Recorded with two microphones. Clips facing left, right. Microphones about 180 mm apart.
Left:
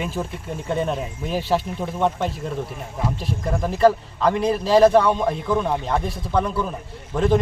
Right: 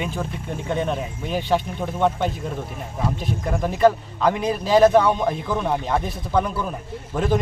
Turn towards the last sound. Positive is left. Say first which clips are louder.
# left 3 dB
turn(degrees=-5)  # may be behind; listen again after turning